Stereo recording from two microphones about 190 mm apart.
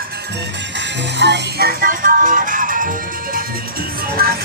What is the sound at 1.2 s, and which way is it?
Music, 65° right (ahead or behind).